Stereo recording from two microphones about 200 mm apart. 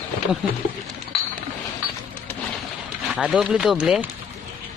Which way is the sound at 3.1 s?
5° right (ahead or behind).